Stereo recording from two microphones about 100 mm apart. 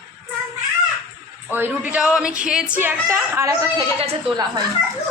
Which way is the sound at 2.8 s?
25° right (ahead or behind).